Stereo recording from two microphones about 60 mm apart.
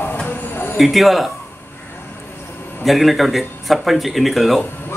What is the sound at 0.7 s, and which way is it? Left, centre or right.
Speech, centre.